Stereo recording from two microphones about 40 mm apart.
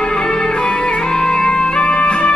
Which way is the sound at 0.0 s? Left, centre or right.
Left.